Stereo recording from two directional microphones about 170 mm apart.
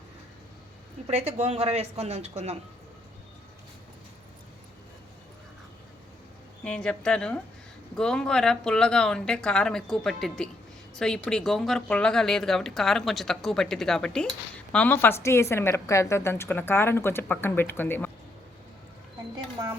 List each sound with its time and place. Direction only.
1.4 s a man's voice: 40° right (ahead or behind)
6.7 s speech: 5° left (ahead or behind)